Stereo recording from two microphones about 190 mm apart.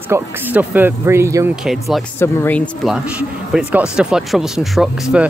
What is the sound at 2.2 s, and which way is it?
Speech, 10° left (ahead or behind).